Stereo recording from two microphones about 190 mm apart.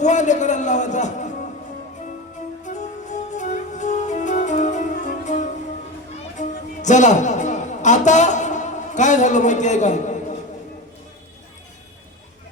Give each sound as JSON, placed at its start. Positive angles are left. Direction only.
{"t": 0.0, "sound": "a sound", "side_deg": 40}
{"t": 2.6, "sound": "music", "side_deg": 40}
{"t": 6.8, "sound": "a man's voice", "side_deg": 40}